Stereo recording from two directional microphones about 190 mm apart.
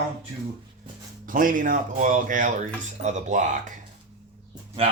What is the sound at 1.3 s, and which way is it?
Speech, 45° right (ahead or behind).